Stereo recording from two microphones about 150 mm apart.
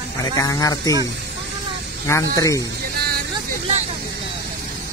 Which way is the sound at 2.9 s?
90° right.